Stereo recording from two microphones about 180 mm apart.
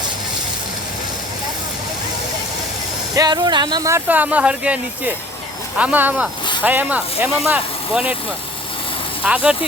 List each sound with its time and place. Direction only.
3.2 s speech: 25° right (ahead or behind)
9.2 s speech: 5° right (ahead or behind)